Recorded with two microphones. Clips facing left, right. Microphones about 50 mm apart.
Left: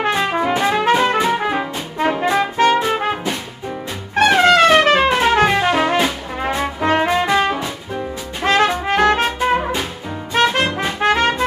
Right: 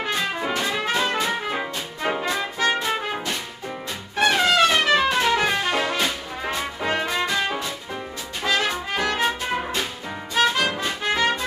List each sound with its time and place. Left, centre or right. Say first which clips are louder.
0.0 s music: left 7 dB; left
0.7 s music: left 10 dB; left
1.0 s music: left 7 dB; left
1.5 s brass instrument: left 6 dB; left
2.3 s music: left 8 dB; left
4.4 s trumpet: left 8 dB; left
5.4 s music: left 7 dB; left
6.4 s brass instrument: left 8 dB; left
8.8 s music: left 10 dB; left
9.4 s music: left 8 dB; centre
10.3 s brass instrument: left 4 dB; left
11.0 s music: left 8 dB; left